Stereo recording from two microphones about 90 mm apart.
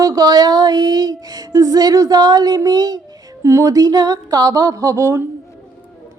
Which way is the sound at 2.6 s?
50° right (ahead or behind).